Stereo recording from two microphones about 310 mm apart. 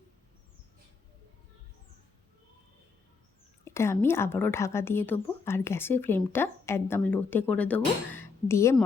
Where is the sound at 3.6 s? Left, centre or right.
Centre.